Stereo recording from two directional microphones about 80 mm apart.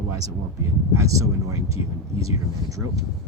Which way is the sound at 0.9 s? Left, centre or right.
Right.